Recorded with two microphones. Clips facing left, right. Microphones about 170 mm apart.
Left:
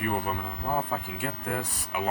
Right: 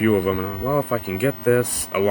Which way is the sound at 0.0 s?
90° right.